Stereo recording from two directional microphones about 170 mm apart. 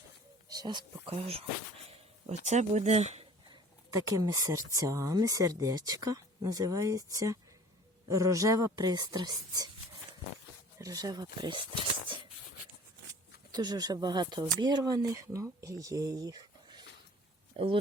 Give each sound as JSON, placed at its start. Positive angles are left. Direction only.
{"t": 0.5, "sound": "speech", "side_deg": -25}
{"t": 3.5, "sound": "speech", "side_deg": -20}
{"t": 10.8, "sound": "speech", "side_deg": -20}
{"t": 13.5, "sound": "speech", "side_deg": -25}